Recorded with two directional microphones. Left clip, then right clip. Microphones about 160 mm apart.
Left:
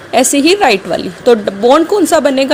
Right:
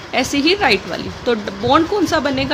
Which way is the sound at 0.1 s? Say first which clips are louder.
Left 7 dB; 40° left (ahead or behind).